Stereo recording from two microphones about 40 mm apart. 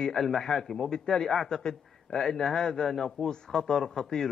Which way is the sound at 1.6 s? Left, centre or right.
Centre.